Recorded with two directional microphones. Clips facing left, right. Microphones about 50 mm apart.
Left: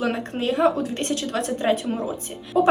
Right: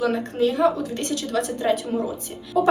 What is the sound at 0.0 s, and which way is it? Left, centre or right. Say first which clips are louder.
Speech: right 3 dB; left.